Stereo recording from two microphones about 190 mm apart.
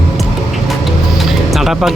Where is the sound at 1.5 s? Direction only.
Centre (ahead or behind).